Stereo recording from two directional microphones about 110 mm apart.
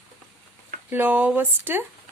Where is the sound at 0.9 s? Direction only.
15° right (ahead or behind).